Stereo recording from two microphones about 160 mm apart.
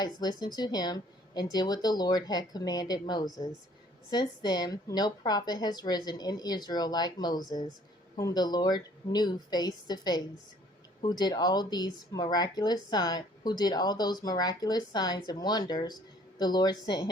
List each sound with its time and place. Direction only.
0.0 s a woman's voice: 25° left (ahead or behind)